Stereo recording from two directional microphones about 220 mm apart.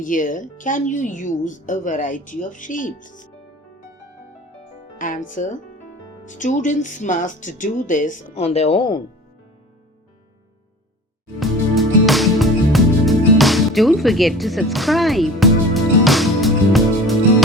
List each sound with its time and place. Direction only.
0.0 s speech: 35° left (ahead or behind)
4.9 s speech: 35° left (ahead or behind)
11.3 s music: centre (ahead or behind)